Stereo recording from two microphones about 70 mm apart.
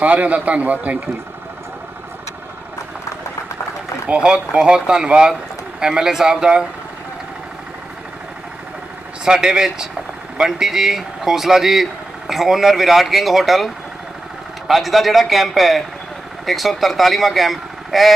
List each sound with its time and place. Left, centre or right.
0.0 s a man's voice: right
4.0 s speech: centre
9.2 s speech: centre
14.7 s speech: centre